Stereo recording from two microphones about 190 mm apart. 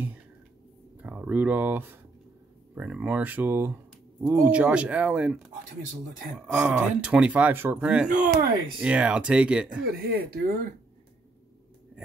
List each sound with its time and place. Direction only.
1.0 s speech: 5° right (ahead or behind)
9.8 s speech: 55° right (ahead or behind)